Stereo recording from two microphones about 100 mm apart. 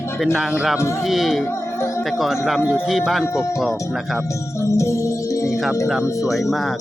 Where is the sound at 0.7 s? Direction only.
25° left (ahead or behind).